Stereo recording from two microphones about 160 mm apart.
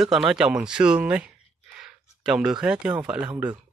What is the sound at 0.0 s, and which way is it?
Speech, 5° right (ahead or behind).